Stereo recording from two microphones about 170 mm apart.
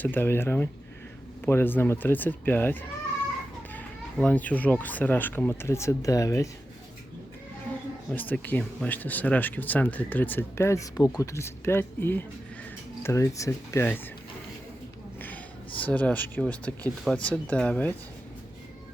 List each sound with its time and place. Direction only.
0.0 s speech: 10° left (ahead or behind)
8.1 s speech: 10° left (ahead or behind)
15.8 s speech: 5° left (ahead or behind)